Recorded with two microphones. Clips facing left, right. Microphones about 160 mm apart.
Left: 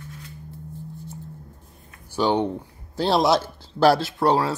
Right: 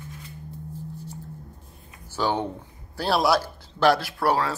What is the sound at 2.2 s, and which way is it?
A man's voice, 15° left (ahead or behind).